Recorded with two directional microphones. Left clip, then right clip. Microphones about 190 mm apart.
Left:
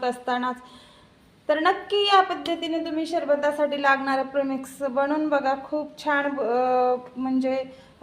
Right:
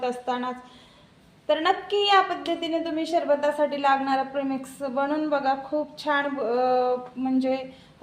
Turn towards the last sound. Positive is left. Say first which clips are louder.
# even
turn(degrees=15)  # may be behind; listen again after turning